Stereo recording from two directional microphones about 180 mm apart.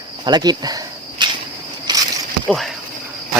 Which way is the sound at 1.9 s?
25° right (ahead or behind).